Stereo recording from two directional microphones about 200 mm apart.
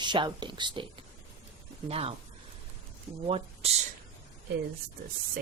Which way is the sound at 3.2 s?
30° right (ahead or behind).